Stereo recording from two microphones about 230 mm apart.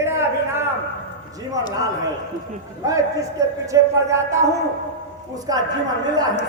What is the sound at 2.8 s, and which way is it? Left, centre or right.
Speech, centre.